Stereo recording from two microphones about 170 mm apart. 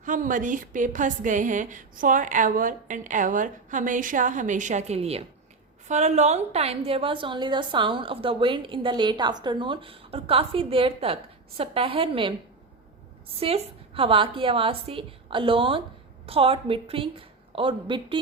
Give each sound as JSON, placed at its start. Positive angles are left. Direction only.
{"t": 0.0, "sound": "a woman's voice", "side_deg": -50}
{"t": 13.4, "sound": "a woman's voice", "side_deg": -35}